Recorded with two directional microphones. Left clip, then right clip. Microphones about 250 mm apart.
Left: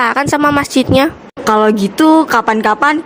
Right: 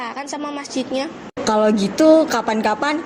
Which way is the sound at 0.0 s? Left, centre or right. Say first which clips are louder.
Left 15 dB; left.